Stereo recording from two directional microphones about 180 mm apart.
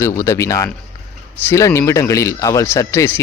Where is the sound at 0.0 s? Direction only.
15° left (ahead or behind).